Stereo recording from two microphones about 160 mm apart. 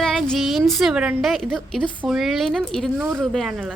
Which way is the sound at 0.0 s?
5° left (ahead or behind).